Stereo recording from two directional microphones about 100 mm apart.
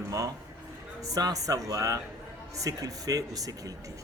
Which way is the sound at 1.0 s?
35° right (ahead or behind).